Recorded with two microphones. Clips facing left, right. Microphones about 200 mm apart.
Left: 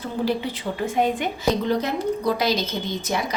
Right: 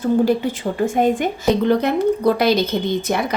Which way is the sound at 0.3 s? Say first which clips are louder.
Right 6 dB; 50° right (ahead or behind).